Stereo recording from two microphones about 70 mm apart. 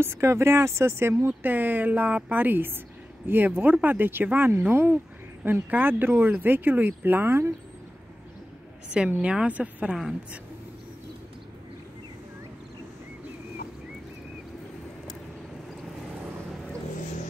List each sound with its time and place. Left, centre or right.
0.0 s speech: right
1.2 s speech: right
8.9 s a woman's voice: centre